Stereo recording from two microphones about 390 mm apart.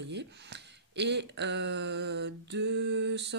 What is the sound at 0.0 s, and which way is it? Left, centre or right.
Speech, right.